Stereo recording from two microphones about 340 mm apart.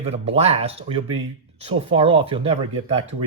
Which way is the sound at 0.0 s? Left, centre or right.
Centre.